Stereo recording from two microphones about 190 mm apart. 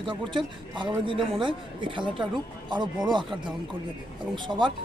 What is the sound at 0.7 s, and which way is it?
Speech, 25° right (ahead or behind).